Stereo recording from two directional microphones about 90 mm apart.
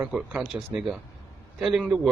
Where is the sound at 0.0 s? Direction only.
15° right (ahead or behind).